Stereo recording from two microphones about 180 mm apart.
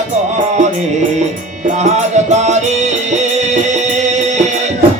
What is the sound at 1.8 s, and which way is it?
Music, 40° right (ahead or behind).